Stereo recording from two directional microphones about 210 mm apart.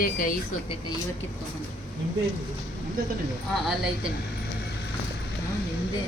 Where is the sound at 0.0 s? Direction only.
40° left (ahead or behind).